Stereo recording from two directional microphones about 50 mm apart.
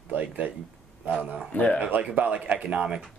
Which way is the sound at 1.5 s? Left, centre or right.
Left.